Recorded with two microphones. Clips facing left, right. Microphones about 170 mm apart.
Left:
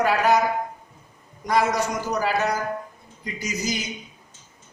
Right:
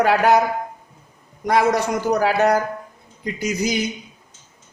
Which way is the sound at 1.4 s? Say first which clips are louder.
Right 4 dB; 60° right (ahead or behind).